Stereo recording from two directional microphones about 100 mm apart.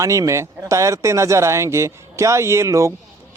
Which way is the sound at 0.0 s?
30° right (ahead or behind).